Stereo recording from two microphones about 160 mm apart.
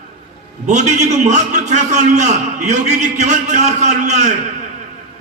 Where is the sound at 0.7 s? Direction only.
45° right (ahead or behind).